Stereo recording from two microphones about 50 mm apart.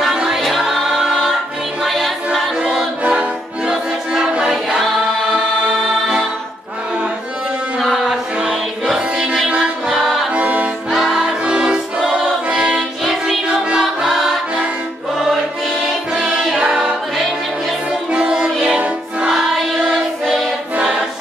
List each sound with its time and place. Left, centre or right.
0.0 s music: centre
0.6 s choir: centre
1.9 s music: centre
2.6 s choir: centre
3.0 s music: right
3.6 s choir: centre
5.3 s music: centre
8.1 s music: centre
10.3 s music: right
10.9 s music: centre
16.1 s music: centre
18.1 s music: centre
19.2 s choir: centre
19.9 s music: centre